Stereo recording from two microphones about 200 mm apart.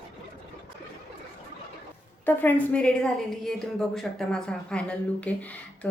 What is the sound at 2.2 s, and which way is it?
A woman's voice, 10° left (ahead or behind).